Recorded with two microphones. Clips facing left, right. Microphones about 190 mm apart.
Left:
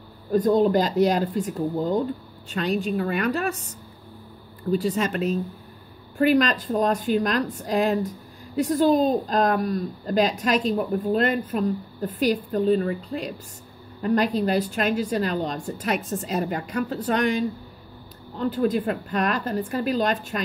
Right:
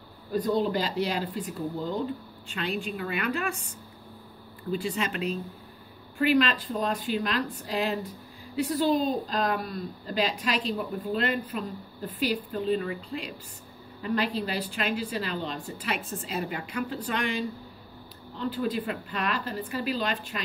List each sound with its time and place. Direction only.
0.3 s a woman's voice: 45° left (ahead or behind)
4.6 s a woman's voice: 40° left (ahead or behind)